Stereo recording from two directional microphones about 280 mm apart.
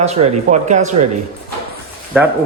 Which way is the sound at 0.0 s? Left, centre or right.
Right.